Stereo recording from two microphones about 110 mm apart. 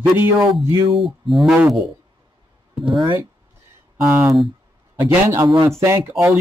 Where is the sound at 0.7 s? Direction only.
45° right (ahead or behind).